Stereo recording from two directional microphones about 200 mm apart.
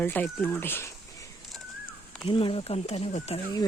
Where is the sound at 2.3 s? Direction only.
25° left (ahead or behind).